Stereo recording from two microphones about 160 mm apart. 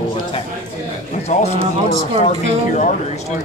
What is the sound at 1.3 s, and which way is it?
A man's voice, 45° left (ahead or behind).